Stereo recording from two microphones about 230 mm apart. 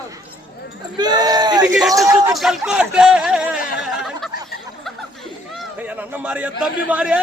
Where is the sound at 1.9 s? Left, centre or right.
Centre.